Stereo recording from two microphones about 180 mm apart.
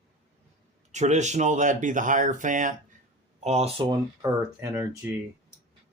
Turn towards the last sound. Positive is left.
turn(degrees=-10)  # may be behind; listen again after turning